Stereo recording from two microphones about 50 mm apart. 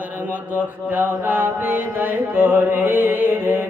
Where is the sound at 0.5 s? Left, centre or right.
Right.